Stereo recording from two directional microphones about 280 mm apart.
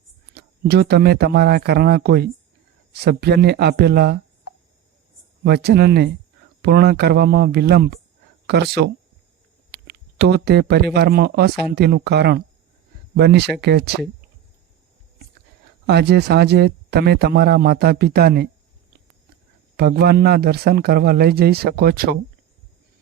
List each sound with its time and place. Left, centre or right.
0.3 s speech: right
5.4 s speech: right
15.9 s speech: right
19.7 s speech: right